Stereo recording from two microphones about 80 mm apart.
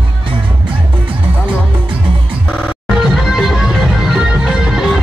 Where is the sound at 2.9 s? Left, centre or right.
Centre.